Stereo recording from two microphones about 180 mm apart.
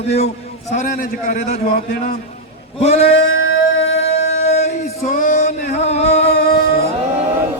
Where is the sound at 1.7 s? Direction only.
55° left (ahead or behind).